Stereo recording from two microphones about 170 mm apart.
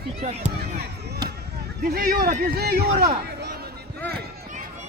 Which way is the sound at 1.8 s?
60° right (ahead or behind).